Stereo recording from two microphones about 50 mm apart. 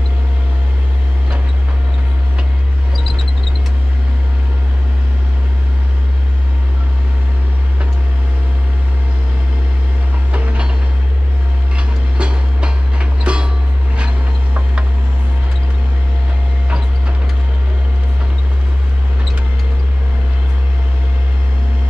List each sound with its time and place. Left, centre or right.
10.3 s train: right
12.2 s train: right
13.9 s a sound: right